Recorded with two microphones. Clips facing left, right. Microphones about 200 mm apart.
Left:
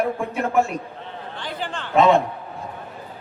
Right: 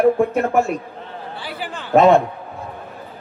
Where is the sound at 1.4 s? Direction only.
5° right (ahead or behind).